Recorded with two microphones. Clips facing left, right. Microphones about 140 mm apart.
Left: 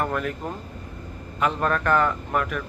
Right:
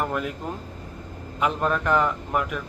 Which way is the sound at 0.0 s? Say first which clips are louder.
Left 1 dB; 15° right (ahead or behind).